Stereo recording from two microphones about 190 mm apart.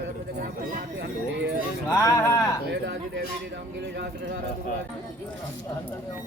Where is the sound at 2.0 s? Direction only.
20° left (ahead or behind).